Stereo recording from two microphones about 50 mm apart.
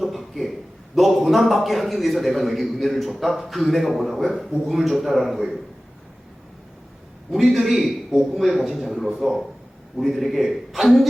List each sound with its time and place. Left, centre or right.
0.0 s a sound: centre
0.9 s a man's voice: centre
7.3 s a man's voice: centre